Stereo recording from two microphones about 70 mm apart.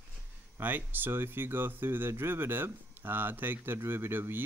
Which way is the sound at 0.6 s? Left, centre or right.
Right.